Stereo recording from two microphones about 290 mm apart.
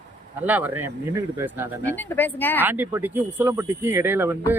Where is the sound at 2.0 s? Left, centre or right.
Centre.